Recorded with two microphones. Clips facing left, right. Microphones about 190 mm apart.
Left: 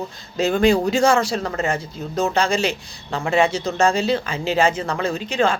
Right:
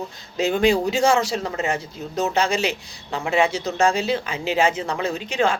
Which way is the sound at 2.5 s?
15° right (ahead or behind).